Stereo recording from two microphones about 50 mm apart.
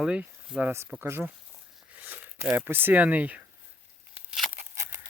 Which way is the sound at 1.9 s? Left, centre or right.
Right.